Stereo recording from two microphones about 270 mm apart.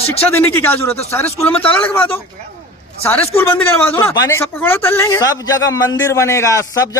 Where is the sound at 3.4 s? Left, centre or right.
Centre.